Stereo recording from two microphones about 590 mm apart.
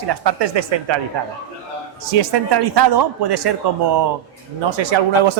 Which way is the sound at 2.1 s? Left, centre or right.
Right.